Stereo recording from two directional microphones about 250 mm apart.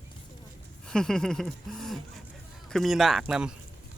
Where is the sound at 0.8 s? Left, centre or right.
Centre.